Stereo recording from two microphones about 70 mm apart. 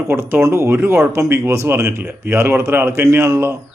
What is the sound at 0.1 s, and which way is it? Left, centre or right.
A man's voice, right.